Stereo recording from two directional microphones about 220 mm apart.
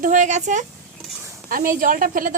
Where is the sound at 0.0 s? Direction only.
35° right (ahead or behind).